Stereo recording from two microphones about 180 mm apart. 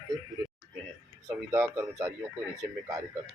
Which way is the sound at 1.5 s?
15° right (ahead or behind).